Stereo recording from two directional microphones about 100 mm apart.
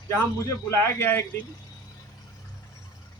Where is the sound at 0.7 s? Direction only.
25° left (ahead or behind).